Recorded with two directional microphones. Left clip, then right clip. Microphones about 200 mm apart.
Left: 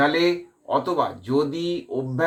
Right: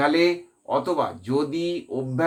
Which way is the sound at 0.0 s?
40° right (ahead or behind).